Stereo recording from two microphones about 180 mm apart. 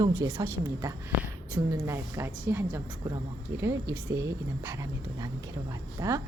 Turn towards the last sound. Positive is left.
turn(degrees=-15)  # may be behind; listen again after turning